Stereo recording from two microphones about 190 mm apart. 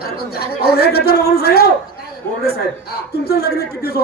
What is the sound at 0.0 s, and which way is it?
A man's voice, 55° left (ahead or behind).